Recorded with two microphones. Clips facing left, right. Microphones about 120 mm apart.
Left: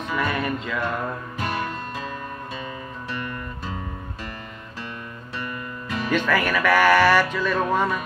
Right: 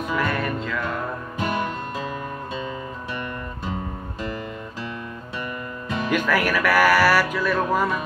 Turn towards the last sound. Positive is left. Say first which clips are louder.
# even
turn(degrees=-10)  # may be behind; listen again after turning